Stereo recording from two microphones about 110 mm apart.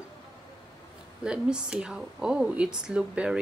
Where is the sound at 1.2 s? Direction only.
10° right (ahead or behind).